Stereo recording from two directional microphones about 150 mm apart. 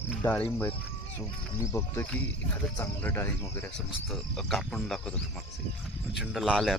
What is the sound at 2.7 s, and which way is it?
Speech, 15° left (ahead or behind).